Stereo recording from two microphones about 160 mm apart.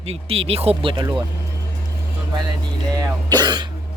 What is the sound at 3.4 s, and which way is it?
Speech, 25° right (ahead or behind).